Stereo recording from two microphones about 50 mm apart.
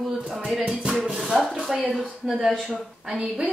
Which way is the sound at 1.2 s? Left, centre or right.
Centre.